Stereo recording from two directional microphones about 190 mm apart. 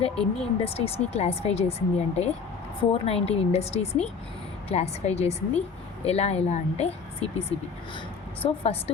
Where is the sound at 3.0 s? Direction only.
30° left (ahead or behind).